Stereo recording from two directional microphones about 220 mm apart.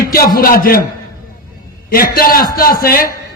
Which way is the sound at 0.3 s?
40° left (ahead or behind).